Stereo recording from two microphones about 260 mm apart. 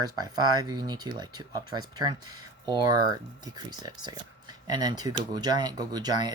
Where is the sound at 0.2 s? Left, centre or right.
Centre.